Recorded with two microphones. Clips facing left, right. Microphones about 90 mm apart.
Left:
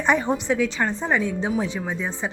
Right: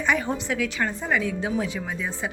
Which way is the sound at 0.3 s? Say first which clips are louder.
Left 5 dB; 20° left (ahead or behind).